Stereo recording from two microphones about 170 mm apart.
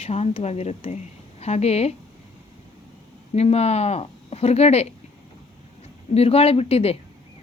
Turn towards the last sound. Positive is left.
turn(degrees=35)  # may be behind; listen again after turning